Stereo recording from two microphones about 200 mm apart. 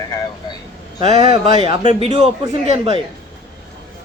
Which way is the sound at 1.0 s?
30° right (ahead or behind).